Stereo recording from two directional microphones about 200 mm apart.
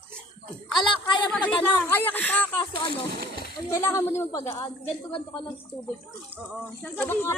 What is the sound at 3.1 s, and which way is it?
Splash, 55° right (ahead or behind).